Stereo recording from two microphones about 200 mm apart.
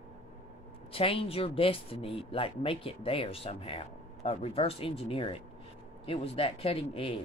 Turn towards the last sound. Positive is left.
turn(degrees=30)  # may be behind; listen again after turning